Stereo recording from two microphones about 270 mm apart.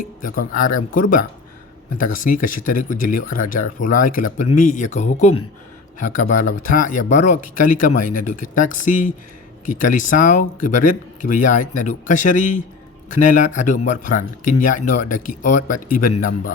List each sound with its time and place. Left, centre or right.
0.2 s speech: left